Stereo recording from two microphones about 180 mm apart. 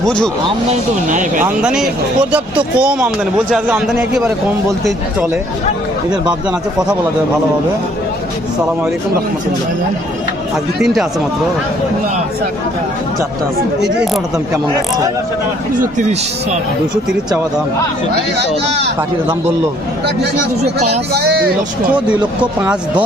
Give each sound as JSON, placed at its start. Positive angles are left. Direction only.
{"t": 0.7, "sound": "speech", "side_deg": -45}
{"t": 1.5, "sound": "a man's voice", "side_deg": -5}
{"t": 10.8, "sound": "a man's voice", "side_deg": 0}
{"t": 14.0, "sound": "a man's voice", "side_deg": -5}
{"t": 15.8, "sound": "speech", "side_deg": -45}
{"t": 21.1, "sound": "speech", "side_deg": -60}
{"t": 21.9, "sound": "speech", "side_deg": -5}